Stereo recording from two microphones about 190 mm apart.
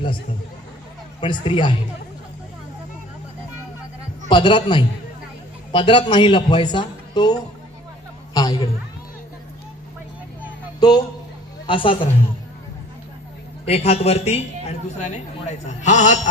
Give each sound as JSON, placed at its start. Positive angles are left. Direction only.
{"t": 1.2, "sound": "a man's voice", "side_deg": 25}
{"t": 4.3, "sound": "a man's voice", "side_deg": 25}
{"t": 8.3, "sound": "a sound", "side_deg": 20}
{"t": 10.8, "sound": "a sound", "side_deg": 20}
{"t": 11.6, "sound": "a man's voice", "side_deg": 25}
{"t": 13.7, "sound": "a man's voice", "side_deg": 30}